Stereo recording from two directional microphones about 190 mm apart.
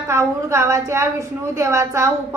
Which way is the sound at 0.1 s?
15° right (ahead or behind).